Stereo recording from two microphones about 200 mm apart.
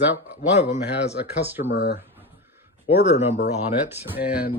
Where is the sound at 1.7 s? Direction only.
55° left (ahead or behind).